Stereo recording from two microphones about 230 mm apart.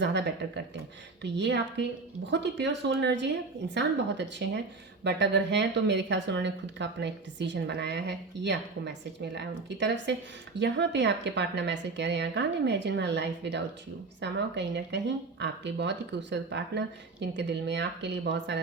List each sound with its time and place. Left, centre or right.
0.0 s speech: right